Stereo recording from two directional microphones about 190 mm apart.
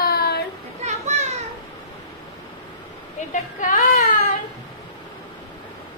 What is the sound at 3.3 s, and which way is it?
Speech, 45° left (ahead or behind).